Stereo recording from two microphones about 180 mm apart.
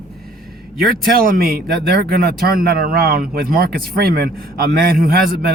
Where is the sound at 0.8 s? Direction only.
55° right (ahead or behind).